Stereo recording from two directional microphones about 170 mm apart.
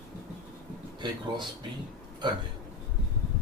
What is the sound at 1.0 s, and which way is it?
Speech, 25° right (ahead or behind).